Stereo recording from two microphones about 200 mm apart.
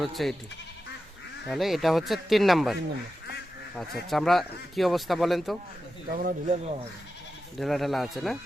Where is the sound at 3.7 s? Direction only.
Centre (ahead or behind).